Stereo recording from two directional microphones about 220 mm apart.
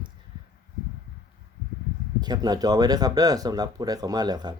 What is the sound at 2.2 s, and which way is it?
Speech, 20° right (ahead or behind).